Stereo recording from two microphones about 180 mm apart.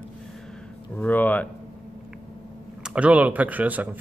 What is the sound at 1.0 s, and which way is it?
Speech, 10° left (ahead or behind).